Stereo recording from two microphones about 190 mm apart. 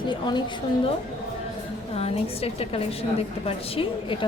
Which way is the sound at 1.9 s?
30° left (ahead or behind).